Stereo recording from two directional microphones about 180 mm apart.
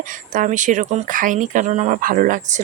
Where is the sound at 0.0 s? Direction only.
50° right (ahead or behind).